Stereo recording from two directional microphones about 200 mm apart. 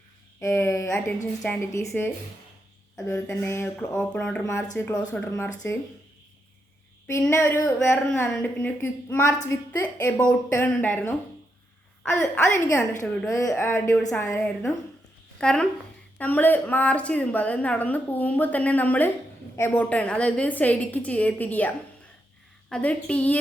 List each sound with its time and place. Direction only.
0.3 s a woman's voice: 10° left (ahead or behind)
2.9 s a woman's voice: 10° left (ahead or behind)
7.1 s a woman's voice: 10° left (ahead or behind)
12.1 s a woman's voice: 10° left (ahead or behind)
22.7 s a woman's voice: 5° left (ahead or behind)